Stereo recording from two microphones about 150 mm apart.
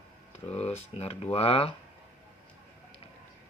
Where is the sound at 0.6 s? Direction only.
45° left (ahead or behind).